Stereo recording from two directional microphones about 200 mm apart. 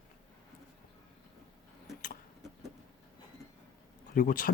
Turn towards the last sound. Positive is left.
turn(degrees=45)  # may be behind; listen again after turning